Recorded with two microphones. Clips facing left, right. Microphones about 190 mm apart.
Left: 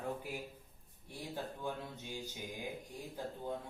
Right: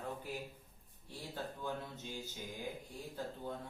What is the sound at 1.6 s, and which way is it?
Speech, 15° left (ahead or behind).